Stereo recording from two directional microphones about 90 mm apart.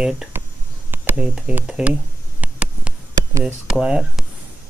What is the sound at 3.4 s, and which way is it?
Speech, 10° right (ahead or behind).